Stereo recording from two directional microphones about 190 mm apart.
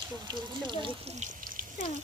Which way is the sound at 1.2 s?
45° right (ahead or behind).